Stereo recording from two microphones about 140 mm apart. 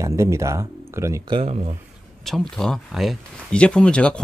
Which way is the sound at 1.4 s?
55° right (ahead or behind).